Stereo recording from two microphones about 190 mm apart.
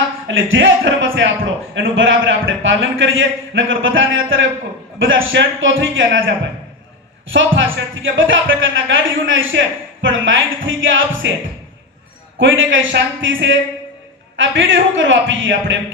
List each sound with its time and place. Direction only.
0.3 s speech: 90° right
12.4 s a man's voice: 90° right